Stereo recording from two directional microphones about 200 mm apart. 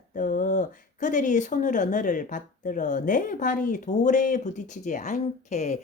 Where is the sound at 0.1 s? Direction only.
40° left (ahead or behind).